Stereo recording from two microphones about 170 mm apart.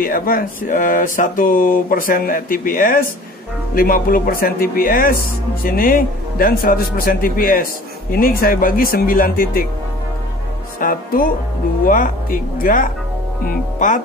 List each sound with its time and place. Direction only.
0.0 s speech: 60° left (ahead or behind)
10.8 s speech: 55° left (ahead or behind)